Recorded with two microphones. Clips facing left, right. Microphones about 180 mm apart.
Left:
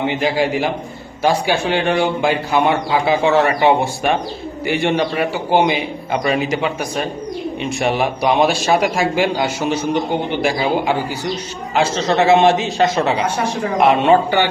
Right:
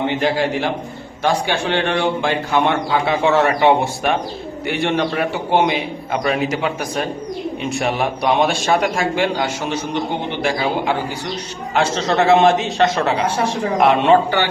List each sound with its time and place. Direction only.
0.2 s a man's voice: 10° left (ahead or behind)
11.7 s a man's voice: centre (ahead or behind)